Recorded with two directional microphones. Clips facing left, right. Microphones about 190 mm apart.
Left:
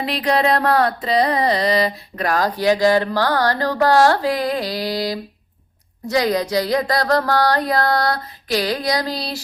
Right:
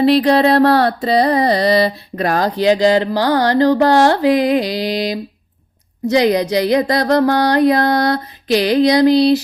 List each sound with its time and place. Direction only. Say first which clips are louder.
0.0 s carnatic music: right 8 dB; 30° right (ahead or behind)